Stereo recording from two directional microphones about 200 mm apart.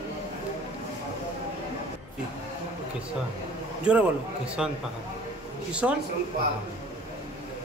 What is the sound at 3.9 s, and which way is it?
Speech, 5° right (ahead or behind).